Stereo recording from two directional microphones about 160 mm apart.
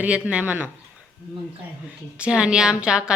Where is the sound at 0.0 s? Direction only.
5° right (ahead or behind).